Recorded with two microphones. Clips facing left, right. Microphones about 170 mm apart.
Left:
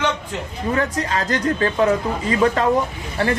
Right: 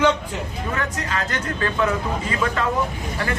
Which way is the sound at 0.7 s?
35° left (ahead or behind).